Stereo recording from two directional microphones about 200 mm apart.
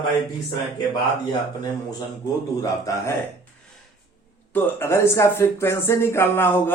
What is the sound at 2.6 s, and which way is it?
Speech, 15° left (ahead or behind).